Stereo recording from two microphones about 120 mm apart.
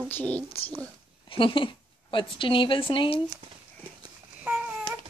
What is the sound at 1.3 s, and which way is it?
A woman's voice, 45° left (ahead or behind).